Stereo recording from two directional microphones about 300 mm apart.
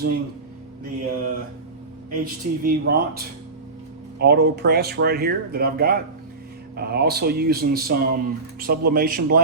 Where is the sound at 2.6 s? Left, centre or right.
Right.